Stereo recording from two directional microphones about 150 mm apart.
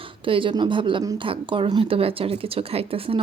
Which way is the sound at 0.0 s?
35° right (ahead or behind).